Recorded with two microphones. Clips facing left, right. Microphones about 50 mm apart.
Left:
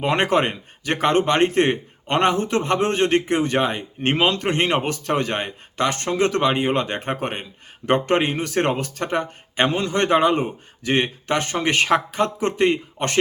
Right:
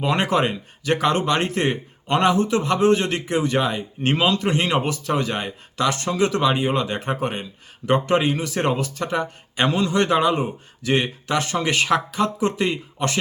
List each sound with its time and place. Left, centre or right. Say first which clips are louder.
0.0 s speech: left 1 dB; left